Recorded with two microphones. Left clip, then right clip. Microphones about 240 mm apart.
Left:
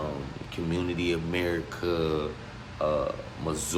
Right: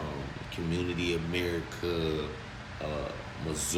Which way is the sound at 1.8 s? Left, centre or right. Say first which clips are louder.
Left 4 dB; centre.